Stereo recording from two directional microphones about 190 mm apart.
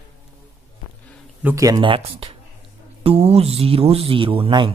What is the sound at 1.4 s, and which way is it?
A man's voice, 15° right (ahead or behind).